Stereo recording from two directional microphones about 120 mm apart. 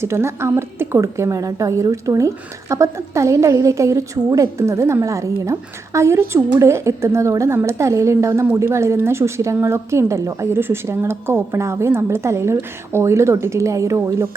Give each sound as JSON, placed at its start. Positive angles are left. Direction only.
{"t": 0.0, "sound": "a woman's voice", "side_deg": -20}